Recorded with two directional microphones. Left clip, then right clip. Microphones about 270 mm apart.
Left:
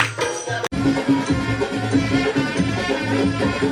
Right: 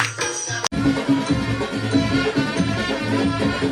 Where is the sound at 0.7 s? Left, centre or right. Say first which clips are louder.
Left 1 dB; centre.